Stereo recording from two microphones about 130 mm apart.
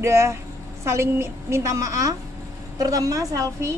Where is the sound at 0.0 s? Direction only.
20° right (ahead or behind).